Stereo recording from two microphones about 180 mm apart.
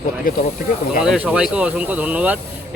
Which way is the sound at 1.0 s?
5° right (ahead or behind).